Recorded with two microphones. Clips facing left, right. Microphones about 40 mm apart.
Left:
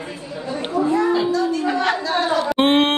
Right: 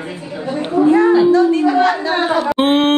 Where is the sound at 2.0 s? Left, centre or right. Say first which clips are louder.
Right 4 dB; right.